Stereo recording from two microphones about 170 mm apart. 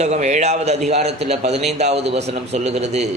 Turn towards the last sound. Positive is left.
turn(degrees=-40)  # may be behind; listen again after turning